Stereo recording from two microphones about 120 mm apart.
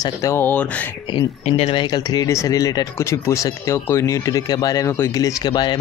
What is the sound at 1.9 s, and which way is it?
Speech, 30° left (ahead or behind).